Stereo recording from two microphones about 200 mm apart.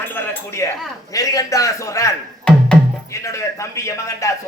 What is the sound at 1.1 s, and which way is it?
A man's voice, 15° left (ahead or behind).